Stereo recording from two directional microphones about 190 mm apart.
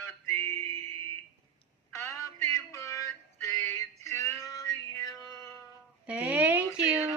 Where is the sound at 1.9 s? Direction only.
15° left (ahead or behind).